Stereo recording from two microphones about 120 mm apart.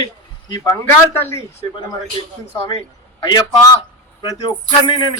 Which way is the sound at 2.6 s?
40° left (ahead or behind).